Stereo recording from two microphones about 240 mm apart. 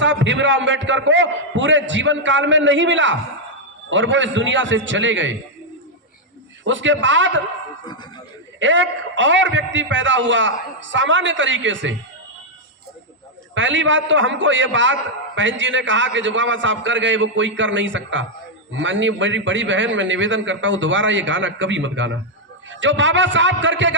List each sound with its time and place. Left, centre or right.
0.0 s a man's voice: right
6.7 s a man's voice: right
8.5 s a man's voice: right
13.5 s a man's voice: right